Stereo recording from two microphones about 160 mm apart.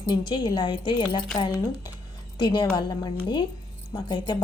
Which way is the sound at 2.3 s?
30° left (ahead or behind).